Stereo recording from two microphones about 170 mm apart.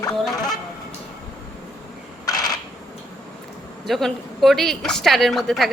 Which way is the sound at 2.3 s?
20° left (ahead or behind).